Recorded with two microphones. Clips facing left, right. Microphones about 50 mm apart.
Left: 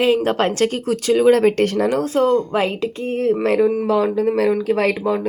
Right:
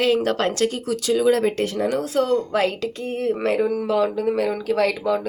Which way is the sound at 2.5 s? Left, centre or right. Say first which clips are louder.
Left 2 dB; left.